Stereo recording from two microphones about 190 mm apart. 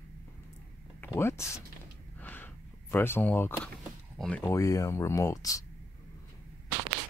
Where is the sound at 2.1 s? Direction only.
10° left (ahead or behind).